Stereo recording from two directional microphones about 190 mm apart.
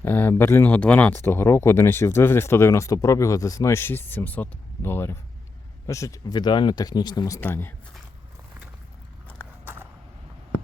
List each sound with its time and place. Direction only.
0.0 s speech: 10° left (ahead or behind)